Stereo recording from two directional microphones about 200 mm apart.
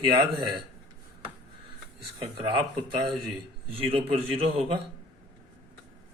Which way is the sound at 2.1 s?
25° right (ahead or behind).